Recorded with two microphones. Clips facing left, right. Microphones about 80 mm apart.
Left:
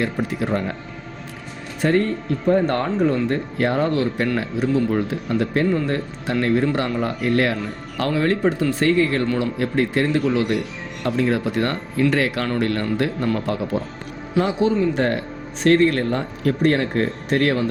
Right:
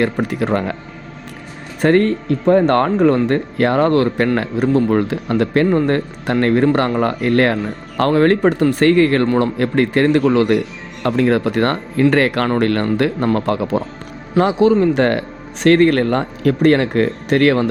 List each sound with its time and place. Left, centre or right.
0.0 s speech: right
1.8 s speech: right
5.7 s speech: right
9.2 s speech: right
9.6 s speech: right